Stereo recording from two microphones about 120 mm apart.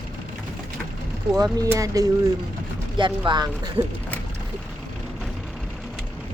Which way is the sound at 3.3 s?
35° right (ahead or behind).